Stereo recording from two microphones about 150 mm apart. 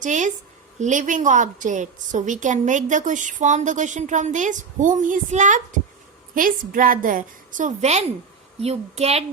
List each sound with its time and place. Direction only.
0.0 s a woman's voice: 55° right (ahead or behind)